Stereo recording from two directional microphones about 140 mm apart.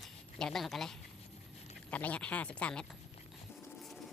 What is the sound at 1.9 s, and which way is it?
Speech, 10° left (ahead or behind).